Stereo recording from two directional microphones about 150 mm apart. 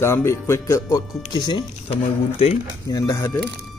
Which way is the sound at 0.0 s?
15° left (ahead or behind).